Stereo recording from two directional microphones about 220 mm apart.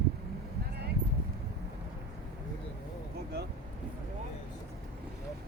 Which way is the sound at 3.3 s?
45° right (ahead or behind).